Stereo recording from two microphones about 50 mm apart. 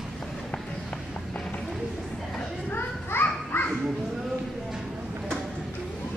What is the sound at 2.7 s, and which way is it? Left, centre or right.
Children playing, left.